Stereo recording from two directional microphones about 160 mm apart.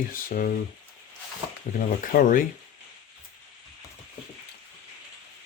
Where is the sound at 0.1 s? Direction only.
60° left (ahead or behind).